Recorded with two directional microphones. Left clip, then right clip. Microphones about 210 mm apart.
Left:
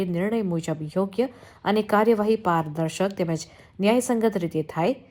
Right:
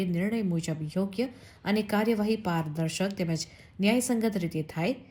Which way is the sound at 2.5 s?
35° left (ahead or behind).